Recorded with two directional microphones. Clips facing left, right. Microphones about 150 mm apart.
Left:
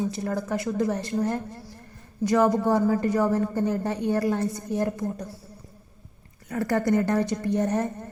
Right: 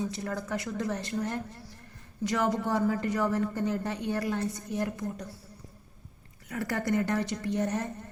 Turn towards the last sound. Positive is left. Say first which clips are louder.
# left 5 dB
turn(degrees=40)  # may be behind; listen again after turning